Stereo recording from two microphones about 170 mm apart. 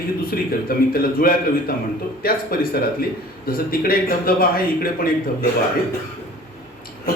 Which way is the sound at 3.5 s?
60° left (ahead or behind).